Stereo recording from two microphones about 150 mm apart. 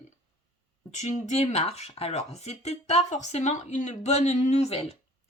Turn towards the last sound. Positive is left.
turn(degrees=45)  # may be behind; listen again after turning